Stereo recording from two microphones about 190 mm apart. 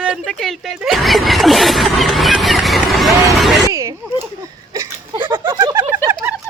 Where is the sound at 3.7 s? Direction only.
15° right (ahead or behind).